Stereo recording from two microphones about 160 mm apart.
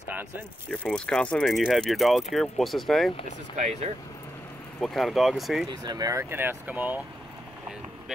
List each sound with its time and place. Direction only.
0.9 s speech: 5° left (ahead or behind)
3.5 s speech: 45° right (ahead or behind)
4.7 s speech: centre (ahead or behind)
5.7 s speech: 25° right (ahead or behind)